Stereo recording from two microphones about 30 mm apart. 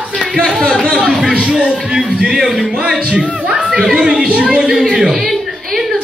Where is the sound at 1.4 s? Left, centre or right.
Right.